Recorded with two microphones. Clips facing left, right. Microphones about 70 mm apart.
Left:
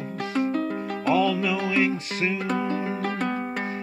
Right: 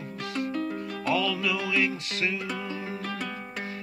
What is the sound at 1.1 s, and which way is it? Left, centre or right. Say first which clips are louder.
Music: left 5 dB; left.